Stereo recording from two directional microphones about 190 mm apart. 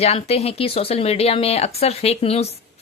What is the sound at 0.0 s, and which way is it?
Speech, 30° left (ahead or behind).